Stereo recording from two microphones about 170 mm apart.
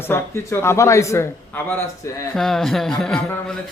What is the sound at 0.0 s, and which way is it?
A man's voice, 15° left (ahead or behind).